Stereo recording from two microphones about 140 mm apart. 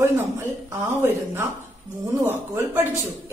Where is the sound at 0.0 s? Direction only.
20° right (ahead or behind).